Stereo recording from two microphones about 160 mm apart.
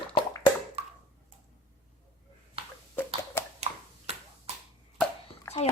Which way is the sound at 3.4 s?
15° left (ahead or behind).